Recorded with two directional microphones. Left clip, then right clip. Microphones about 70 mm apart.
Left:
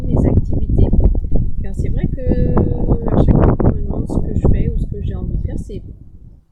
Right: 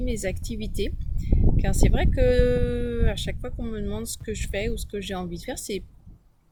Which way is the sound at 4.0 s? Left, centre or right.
Right.